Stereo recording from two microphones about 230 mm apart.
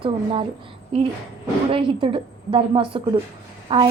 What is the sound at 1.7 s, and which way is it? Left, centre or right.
A woman's voice, right.